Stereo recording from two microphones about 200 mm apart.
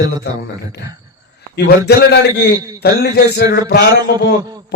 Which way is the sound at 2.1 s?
60° left (ahead or behind).